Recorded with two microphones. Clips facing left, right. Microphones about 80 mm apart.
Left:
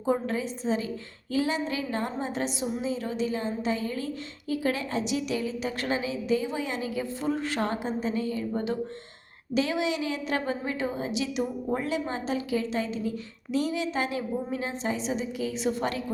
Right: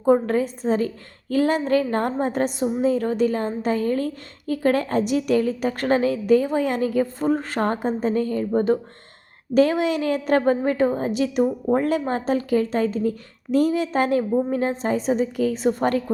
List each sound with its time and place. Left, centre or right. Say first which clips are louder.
0.0 s a woman's voice: right 9 dB; right